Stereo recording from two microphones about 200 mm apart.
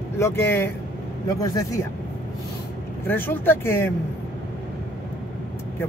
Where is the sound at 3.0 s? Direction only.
10° left (ahead or behind).